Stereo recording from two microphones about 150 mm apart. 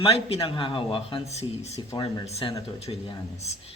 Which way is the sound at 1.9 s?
25° left (ahead or behind).